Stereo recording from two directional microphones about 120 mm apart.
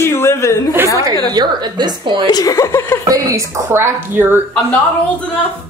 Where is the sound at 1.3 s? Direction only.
35° right (ahead or behind).